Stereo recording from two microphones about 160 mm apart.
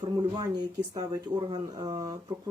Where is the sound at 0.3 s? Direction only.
25° right (ahead or behind).